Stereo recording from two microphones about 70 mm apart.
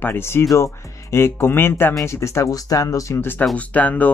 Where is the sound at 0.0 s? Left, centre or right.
Left.